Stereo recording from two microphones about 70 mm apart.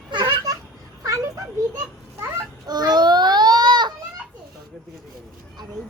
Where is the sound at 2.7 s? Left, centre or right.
Right.